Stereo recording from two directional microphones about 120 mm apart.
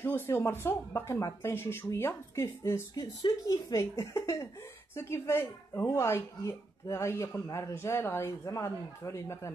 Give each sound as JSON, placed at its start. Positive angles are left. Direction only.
{"t": 0.0, "sound": "speech", "side_deg": 15}
{"t": 2.9, "sound": "speech", "side_deg": 35}